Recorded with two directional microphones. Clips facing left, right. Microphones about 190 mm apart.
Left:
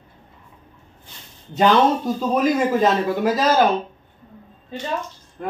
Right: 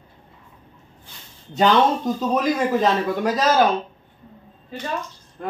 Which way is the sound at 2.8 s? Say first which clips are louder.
Left 2 dB; 5° left (ahead or behind).